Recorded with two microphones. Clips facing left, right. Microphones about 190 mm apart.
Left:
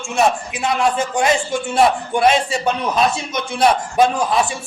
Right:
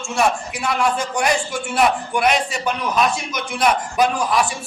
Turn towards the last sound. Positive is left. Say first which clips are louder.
# left 2 dB
turn(degrees=25)  # may be behind; listen again after turning